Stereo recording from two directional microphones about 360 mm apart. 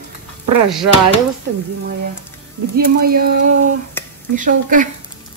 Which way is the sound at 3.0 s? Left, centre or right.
Right.